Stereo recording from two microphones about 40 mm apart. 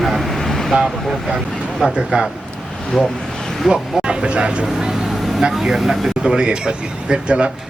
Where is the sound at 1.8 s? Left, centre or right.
Centre.